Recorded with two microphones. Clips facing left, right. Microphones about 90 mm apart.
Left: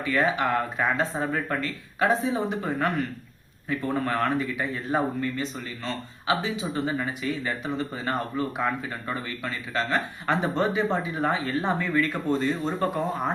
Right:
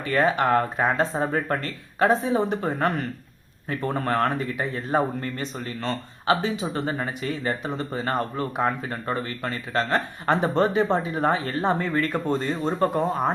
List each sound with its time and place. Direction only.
0.0 s speech: 45° right (ahead or behind)